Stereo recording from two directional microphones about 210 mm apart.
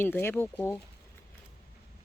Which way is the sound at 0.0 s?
10° left (ahead or behind).